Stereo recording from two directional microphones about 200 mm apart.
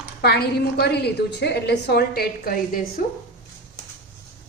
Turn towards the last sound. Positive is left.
turn(degrees=50)  # may be behind; listen again after turning